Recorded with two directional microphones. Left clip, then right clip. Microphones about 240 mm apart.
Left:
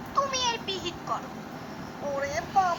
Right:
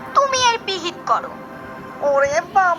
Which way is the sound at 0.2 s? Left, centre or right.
Centre.